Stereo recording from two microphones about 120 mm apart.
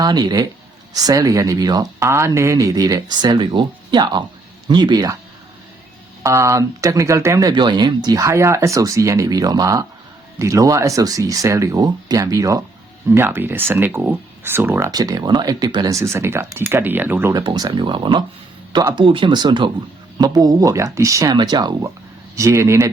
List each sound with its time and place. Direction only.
0.0 s speech: 35° right (ahead or behind)
6.2 s speech: 25° right (ahead or behind)
7.5 s speech: 40° right (ahead or behind); by 14.9 s 20° right (ahead or behind)
14.9 s speech: 30° right (ahead or behind)
17.3 s speech: 35° right (ahead or behind)
21.2 s speech: 40° right (ahead or behind); by 22.9 s 25° right (ahead or behind)